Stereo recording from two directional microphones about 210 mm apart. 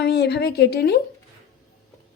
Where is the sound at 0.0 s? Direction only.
50° left (ahead or behind).